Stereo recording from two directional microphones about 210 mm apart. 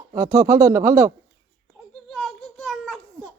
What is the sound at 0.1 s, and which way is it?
Speech, 20° right (ahead or behind).